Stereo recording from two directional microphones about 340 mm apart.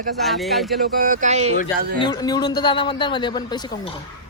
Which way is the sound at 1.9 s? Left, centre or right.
Centre.